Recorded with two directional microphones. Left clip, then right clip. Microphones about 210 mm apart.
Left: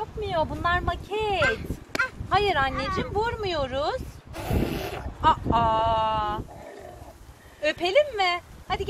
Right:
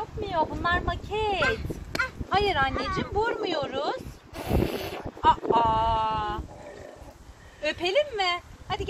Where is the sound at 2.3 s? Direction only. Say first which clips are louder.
Left 1 dB; 35° left (ahead or behind).